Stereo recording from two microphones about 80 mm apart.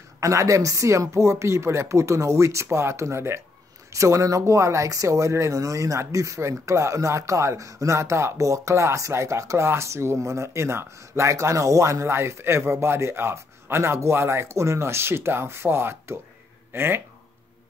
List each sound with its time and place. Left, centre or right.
0.2 s speech: right